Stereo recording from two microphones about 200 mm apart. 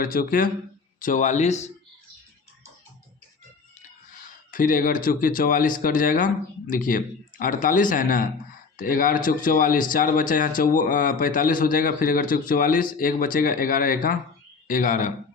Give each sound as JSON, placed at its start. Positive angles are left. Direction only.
{"t": 0.0, "sound": "a man's voice", "side_deg": 45}
{"t": 4.5, "sound": "a man's voice", "side_deg": 45}